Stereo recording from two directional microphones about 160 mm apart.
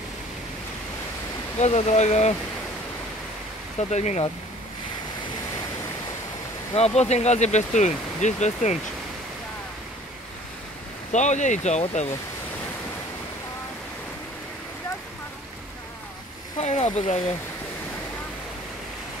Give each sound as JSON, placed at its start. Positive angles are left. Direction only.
{"t": 1.6, "sound": "speech", "side_deg": 45}
{"t": 3.9, "sound": "speech", "side_deg": 45}
{"t": 6.7, "sound": "speech", "side_deg": 40}
{"t": 11.1, "sound": "speech", "side_deg": 50}
{"t": 16.5, "sound": "speech", "side_deg": 45}